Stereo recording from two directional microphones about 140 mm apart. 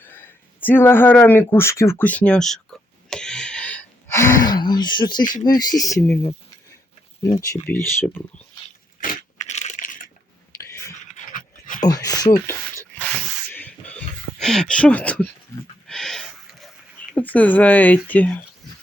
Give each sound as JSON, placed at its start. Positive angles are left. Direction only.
{"t": 0.0, "sound": "a sound", "side_deg": 15}
{"t": 5.5, "sound": "speech", "side_deg": 25}
{"t": 7.2, "sound": "speech", "side_deg": 20}
{"t": 9.0, "sound": "a sound", "side_deg": 65}
{"t": 10.6, "sound": "whispering", "side_deg": 20}
{"t": 11.3, "sound": "dog", "side_deg": 70}
{"t": 11.9, "sound": "speech", "side_deg": 25}
{"t": 12.5, "sound": "a sound", "side_deg": 20}
{"t": 17.2, "sound": "speech", "side_deg": 10}